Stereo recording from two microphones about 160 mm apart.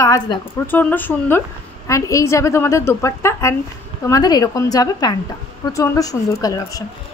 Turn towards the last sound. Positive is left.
turn(degrees=20)  # may be behind; listen again after turning